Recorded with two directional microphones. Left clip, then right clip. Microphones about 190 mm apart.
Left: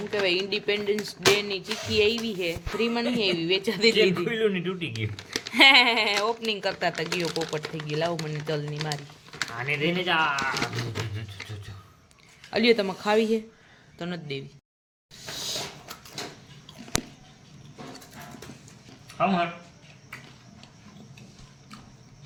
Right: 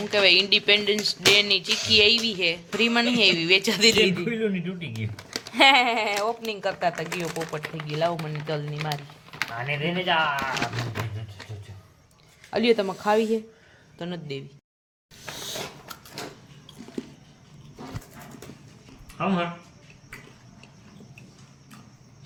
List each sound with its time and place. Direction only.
0.1 s speech: centre (ahead or behind)
4.1 s a man's voice: 40° left (ahead or behind)
5.3 s speech: 5° left (ahead or behind)
9.5 s speech: 55° left (ahead or behind)
12.5 s speech: centre (ahead or behind)
19.2 s speech: 15° left (ahead or behind)